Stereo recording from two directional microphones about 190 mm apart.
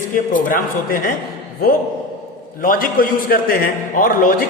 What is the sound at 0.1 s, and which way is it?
Speech, 45° left (ahead or behind).